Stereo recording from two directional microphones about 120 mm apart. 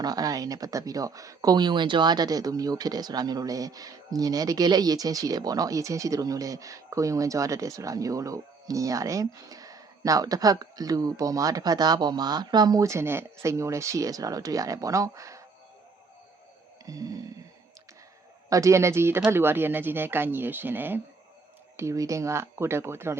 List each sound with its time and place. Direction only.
0.0 s speech: 30° right (ahead or behind)
16.8 s a sound: 30° right (ahead or behind)
18.4 s speech: 25° right (ahead or behind)